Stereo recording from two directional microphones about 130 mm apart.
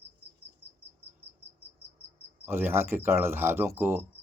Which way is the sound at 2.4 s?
15° right (ahead or behind).